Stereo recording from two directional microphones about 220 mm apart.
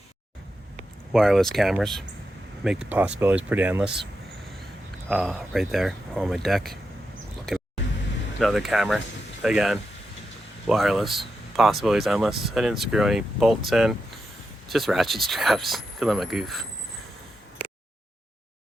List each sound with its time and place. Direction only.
0.8 s speech: centre (ahead or behind)
5.0 s speech: centre (ahead or behind)
8.4 s speech: centre (ahead or behind)